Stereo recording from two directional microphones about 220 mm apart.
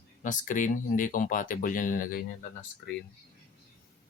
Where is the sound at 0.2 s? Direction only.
35° left (ahead or behind).